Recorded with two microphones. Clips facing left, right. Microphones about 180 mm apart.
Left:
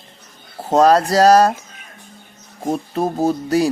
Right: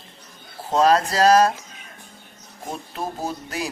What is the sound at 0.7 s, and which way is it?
Speech, 45° left (ahead or behind).